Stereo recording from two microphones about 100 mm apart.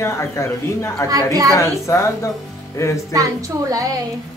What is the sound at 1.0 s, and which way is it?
Speech, 35° right (ahead or behind).